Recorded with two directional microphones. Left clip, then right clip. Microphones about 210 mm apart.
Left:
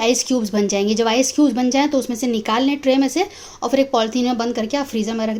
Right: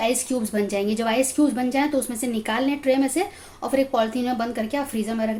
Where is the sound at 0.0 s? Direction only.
40° left (ahead or behind).